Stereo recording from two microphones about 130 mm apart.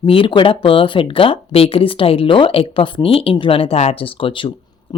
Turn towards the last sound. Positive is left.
turn(degrees=40)  # may be behind; listen again after turning